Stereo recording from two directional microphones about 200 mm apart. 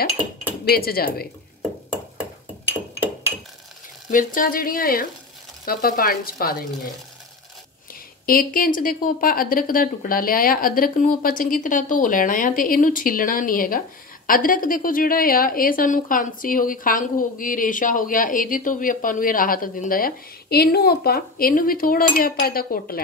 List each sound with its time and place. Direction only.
0.7 s speech: 50° left (ahead or behind)
4.1 s speech: 40° left (ahead or behind)
7.9 s speech: 45° left (ahead or behind)